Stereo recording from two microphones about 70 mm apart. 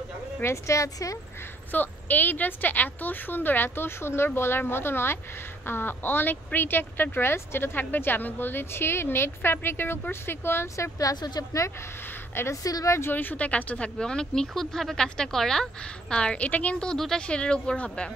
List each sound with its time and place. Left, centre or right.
0.4 s speech: left
1.7 s a woman's voice: left
11.0 s speech: left
12.6 s speech: left
13.1 s speech: left
16.9 s speech: centre